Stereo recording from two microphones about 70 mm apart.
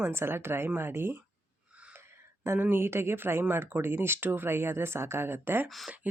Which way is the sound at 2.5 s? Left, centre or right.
Right.